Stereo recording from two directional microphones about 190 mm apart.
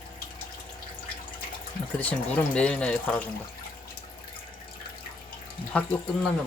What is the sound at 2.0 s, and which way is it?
Speech, 5° left (ahead or behind).